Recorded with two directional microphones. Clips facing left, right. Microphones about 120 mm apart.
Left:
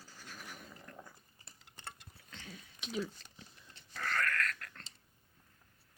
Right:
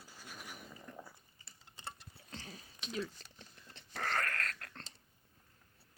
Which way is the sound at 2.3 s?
35° right (ahead or behind).